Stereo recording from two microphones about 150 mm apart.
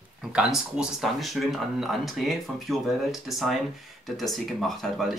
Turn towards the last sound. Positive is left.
turn(degrees=0)  # may be behind; listen again after turning